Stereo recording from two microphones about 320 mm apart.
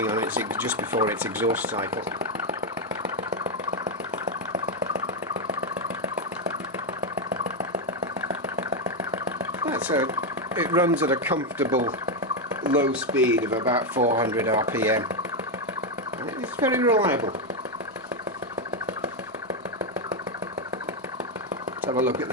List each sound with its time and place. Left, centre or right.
0.0 s speech: centre
3.7 s engine: right
9.6 s a sound: centre
10.5 s speech: centre
12.7 s speech: centre
16.6 s speech: centre
21.8 s speech: centre